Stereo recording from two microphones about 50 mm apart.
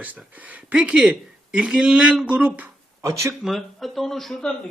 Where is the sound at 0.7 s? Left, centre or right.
Centre.